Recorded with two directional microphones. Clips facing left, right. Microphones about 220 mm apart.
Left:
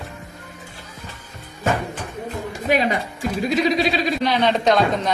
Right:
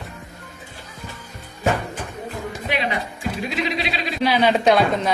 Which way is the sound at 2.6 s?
45° left (ahead or behind).